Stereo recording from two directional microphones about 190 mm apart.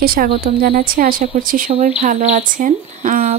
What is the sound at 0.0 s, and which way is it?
Speech, 50° right (ahead or behind).